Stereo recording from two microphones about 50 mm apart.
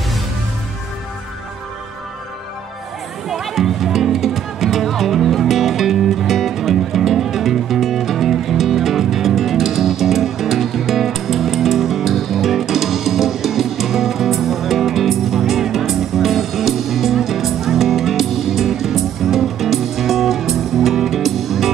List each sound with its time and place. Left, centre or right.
3.3 s music: centre